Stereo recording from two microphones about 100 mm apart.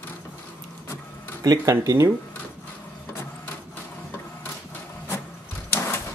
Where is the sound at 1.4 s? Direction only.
40° right (ahead or behind).